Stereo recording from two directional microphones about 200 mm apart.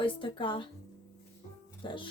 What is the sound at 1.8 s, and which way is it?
Speech, 25° left (ahead or behind).